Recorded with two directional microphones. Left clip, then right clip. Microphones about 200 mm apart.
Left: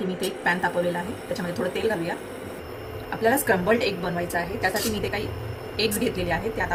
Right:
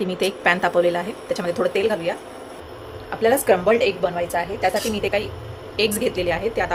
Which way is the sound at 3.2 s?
30° right (ahead or behind).